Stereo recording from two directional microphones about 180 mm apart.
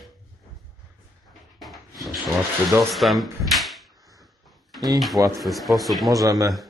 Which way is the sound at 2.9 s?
Centre (ahead or behind).